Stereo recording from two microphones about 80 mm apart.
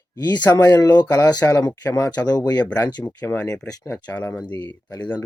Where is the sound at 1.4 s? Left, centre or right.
Left.